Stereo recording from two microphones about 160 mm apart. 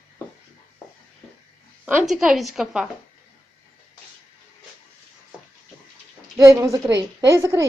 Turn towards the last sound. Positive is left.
turn(degrees=-15)  # may be behind; listen again after turning